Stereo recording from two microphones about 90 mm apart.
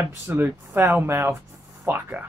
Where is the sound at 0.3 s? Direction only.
25° right (ahead or behind).